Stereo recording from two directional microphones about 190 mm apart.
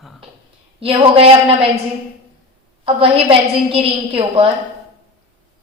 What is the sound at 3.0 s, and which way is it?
A woman's voice, 30° right (ahead or behind).